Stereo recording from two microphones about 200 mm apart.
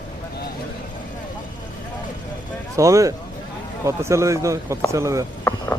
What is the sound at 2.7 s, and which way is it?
Speech, 15° right (ahead or behind).